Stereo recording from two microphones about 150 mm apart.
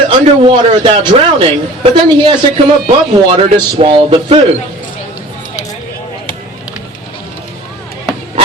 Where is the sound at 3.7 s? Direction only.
35° right (ahead or behind).